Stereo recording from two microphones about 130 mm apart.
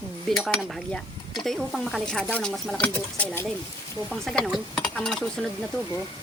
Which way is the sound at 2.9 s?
10° left (ahead or behind).